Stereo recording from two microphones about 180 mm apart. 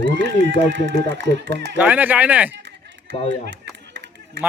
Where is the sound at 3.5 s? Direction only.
75° right (ahead or behind).